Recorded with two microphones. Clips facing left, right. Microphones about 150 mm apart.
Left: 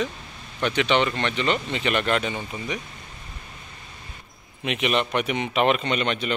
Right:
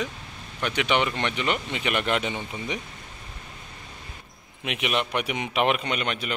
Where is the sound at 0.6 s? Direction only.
10° right (ahead or behind).